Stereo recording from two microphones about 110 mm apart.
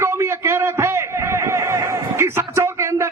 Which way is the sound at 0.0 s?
25° right (ahead or behind).